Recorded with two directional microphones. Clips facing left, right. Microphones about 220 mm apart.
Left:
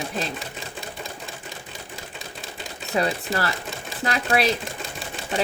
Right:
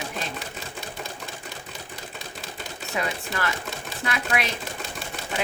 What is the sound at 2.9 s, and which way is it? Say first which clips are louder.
Speech: left 6 dB; 35° left (ahead or behind).